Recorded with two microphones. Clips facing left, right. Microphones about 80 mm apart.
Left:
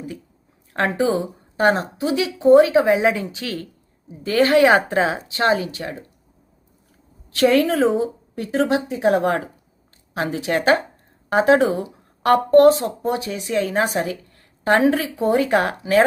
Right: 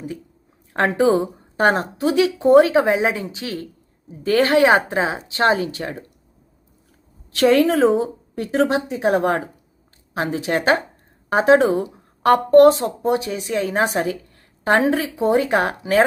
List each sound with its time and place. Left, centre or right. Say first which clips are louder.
0.9 s speech: right 3 dB; right
4.2 s speech: even; right
4.5 s speech: left 2 dB; right
5.3 s speech: right 1 dB; right
7.3 s speech: right 1 dB; right
14.6 s speech: left 1 dB; right